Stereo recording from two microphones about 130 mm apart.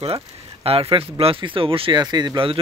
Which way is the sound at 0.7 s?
45° right (ahead or behind).